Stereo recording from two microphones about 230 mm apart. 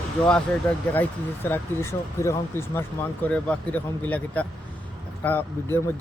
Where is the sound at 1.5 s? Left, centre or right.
Centre.